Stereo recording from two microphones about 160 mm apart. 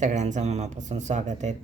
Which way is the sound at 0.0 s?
50° right (ahead or behind).